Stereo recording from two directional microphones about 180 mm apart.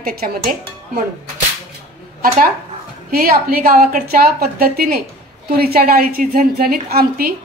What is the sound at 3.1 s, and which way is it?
A woman's voice, 55° right (ahead or behind).